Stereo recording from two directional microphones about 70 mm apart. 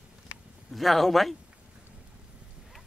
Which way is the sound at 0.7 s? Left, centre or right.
Centre.